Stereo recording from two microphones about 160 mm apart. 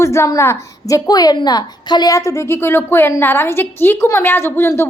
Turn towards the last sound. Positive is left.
turn(degrees=15)  # may be behind; listen again after turning